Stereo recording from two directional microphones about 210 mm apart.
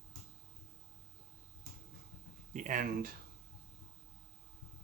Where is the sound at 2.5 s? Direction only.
35° right (ahead or behind).